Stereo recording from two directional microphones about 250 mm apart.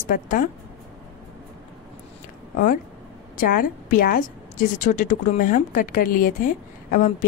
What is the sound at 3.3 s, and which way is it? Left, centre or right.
A woman's voice, left.